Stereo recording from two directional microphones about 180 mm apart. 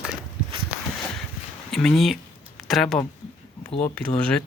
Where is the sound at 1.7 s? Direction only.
Centre (ahead or behind).